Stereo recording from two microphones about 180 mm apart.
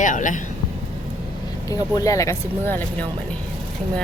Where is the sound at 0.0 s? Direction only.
45° left (ahead or behind).